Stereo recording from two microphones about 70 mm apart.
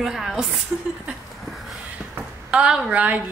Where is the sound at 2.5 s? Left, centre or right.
Centre.